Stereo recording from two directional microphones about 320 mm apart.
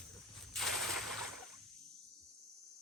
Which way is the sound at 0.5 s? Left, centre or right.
Centre.